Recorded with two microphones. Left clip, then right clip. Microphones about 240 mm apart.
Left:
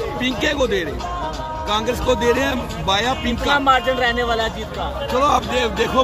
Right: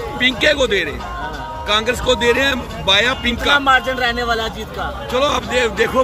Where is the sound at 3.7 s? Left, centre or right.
Right.